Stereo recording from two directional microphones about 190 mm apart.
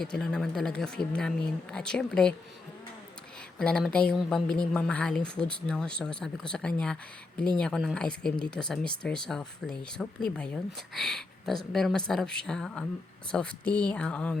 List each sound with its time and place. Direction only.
0.0 s a woman's voice: 5° left (ahead or behind)
3.6 s a woman's voice: 5° left (ahead or behind)